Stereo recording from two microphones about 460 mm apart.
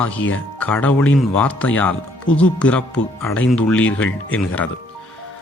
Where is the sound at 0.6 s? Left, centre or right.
Centre.